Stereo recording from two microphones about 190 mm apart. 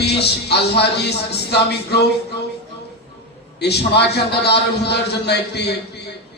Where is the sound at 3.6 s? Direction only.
60° left (ahead or behind).